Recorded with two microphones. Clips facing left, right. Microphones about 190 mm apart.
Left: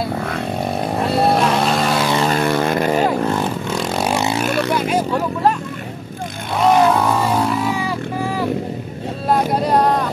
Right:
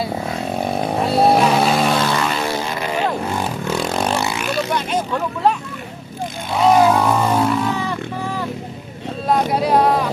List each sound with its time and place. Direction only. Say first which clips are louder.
0.6 s vehicle: right 2 dB; centre (ahead or behind)
2.2 s vehicle: left 5 dB; 55° left (ahead or behind)
3.7 s vehicle: right 2 dB; centre (ahead or behind)
4.1 s vehicle: left 2 dB; 20° left (ahead or behind)
4.7 s vehicle: left 3 dB; 5° left (ahead or behind)
6.6 s vehicle: right 1 dB; centre (ahead or behind)
9.3 s music: even; centre (ahead or behind)